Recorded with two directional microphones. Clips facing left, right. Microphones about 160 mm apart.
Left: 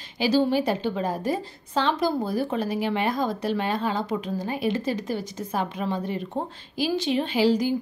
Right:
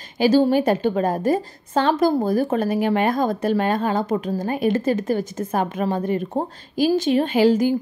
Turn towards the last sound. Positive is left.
turn(degrees=-50)  # may be behind; listen again after turning